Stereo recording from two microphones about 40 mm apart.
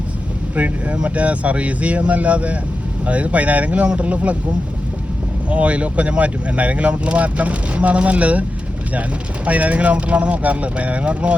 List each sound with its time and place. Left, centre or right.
0.5 s speech: right
5.5 s speech: right
9.5 s speech: right